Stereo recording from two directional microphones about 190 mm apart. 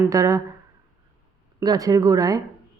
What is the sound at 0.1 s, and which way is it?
Speech, 15° right (ahead or behind).